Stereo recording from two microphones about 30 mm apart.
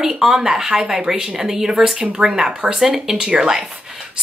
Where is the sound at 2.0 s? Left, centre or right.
Right.